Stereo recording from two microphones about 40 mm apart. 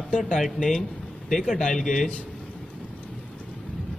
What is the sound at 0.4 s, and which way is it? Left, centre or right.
A man's voice, centre.